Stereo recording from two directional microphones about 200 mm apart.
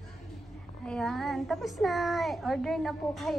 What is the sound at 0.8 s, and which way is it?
A child's voice, 5° left (ahead or behind).